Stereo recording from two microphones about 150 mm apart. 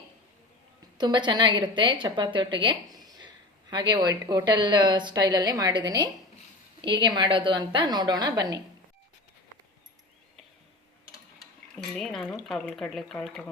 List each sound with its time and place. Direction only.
0.9 s a woman's voice: 30° right (ahead or behind)
11.3 s speech: centre (ahead or behind)